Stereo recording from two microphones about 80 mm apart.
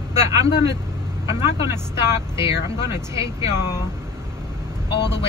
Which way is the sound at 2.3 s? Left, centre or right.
Right.